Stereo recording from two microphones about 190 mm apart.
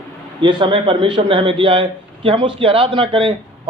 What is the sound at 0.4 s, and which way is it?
A man's voice, 25° right (ahead or behind).